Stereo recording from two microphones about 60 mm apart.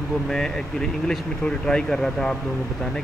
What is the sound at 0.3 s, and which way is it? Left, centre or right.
Speech, centre.